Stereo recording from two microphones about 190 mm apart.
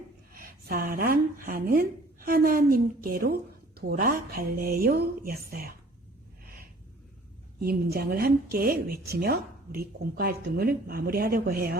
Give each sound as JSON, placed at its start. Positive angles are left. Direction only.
{"t": 0.3, "sound": "a woman's voice", "side_deg": -50}
{"t": 7.6, "sound": "speech", "side_deg": -55}